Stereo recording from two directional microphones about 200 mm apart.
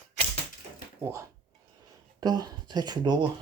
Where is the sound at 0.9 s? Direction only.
15° right (ahead or behind).